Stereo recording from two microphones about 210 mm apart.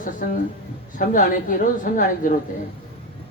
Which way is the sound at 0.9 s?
40° left (ahead or behind).